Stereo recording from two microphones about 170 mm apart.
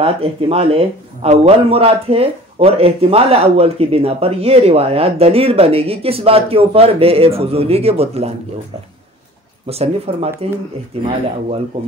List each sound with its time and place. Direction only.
0.0 s a man's voice: 35° right (ahead or behind)
9.7 s a man's voice: 35° right (ahead or behind)